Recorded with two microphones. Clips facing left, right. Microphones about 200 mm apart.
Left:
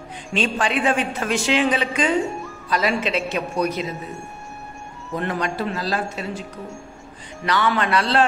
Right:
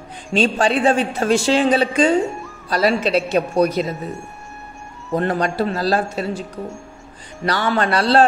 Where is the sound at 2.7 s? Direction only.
35° right (ahead or behind).